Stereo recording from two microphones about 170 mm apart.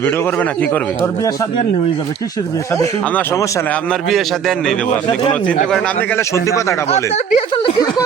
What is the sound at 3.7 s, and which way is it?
A man's voice, 5° left (ahead or behind).